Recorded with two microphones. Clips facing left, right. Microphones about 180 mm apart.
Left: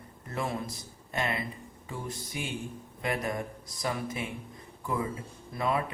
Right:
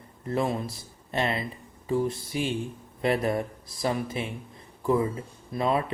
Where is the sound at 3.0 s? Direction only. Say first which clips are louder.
Right 7 dB; 30° right (ahead or behind).